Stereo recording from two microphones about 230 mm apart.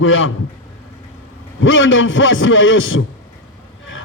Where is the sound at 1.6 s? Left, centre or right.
Left.